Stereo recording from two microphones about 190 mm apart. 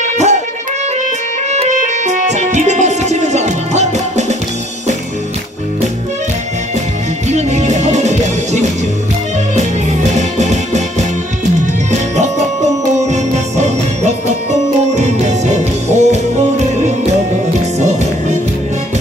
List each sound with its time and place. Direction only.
0.0 s music: 35° right (ahead or behind)
1.5 s music: 40° right (ahead or behind)
7.2 s music: 35° right (ahead or behind)
10.1 s music: 35° right (ahead or behind)
13.1 s music: 35° right (ahead or behind)